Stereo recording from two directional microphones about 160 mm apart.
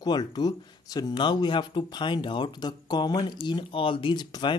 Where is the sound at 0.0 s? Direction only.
25° left (ahead or behind).